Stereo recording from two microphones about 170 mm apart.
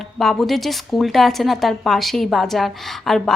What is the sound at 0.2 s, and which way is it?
A woman's voice, centre (ahead or behind).